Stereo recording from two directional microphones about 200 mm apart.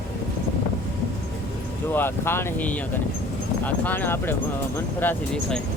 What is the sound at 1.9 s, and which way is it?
Speech, 10° left (ahead or behind).